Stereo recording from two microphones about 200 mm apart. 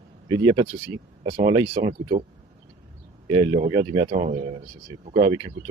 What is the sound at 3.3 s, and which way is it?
Speech, 25° right (ahead or behind).